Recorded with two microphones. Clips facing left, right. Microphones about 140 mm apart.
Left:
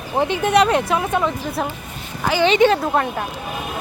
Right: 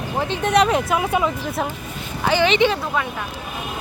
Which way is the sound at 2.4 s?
45° left (ahead or behind).